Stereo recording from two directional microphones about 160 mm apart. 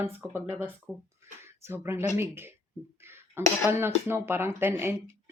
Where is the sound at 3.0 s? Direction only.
15° right (ahead or behind).